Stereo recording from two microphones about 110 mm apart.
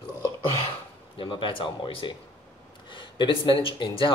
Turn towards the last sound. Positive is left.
turn(degrees=50)  # may be behind; listen again after turning